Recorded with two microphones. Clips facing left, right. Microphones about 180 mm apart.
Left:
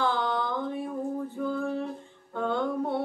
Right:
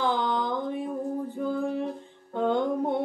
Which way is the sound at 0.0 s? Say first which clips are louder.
Right 1 dB; 15° right (ahead or behind).